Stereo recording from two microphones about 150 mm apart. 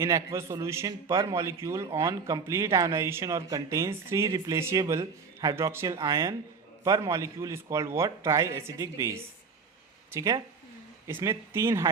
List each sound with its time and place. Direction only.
0.0 s a man's voice: 20° right (ahead or behind)